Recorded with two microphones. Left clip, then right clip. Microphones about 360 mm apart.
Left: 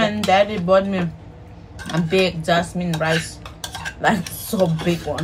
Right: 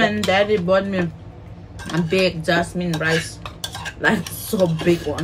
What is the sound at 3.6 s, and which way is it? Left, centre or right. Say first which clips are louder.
Dishes: left 1 dB; left.